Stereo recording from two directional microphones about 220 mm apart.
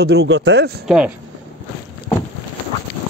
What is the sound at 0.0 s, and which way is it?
Speech, 50° right (ahead or behind).